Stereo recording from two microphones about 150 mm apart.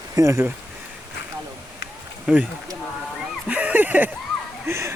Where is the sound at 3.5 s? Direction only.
10° right (ahead or behind).